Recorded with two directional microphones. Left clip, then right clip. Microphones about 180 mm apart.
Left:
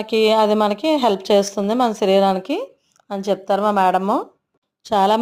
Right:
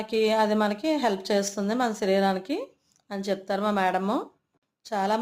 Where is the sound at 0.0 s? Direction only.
40° left (ahead or behind); by 4.3 s 25° left (ahead or behind).